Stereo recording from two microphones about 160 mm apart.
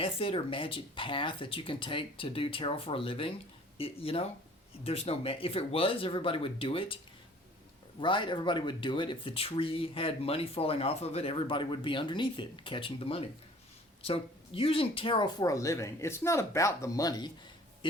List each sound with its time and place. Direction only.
0.0 s speech: 35° left (ahead or behind)
8.0 s speech: 30° left (ahead or behind)